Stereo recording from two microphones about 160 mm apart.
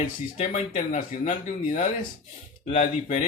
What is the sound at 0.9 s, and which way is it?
Speech, 55° left (ahead or behind).